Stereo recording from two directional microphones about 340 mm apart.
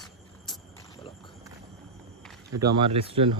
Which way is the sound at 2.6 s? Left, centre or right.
Centre.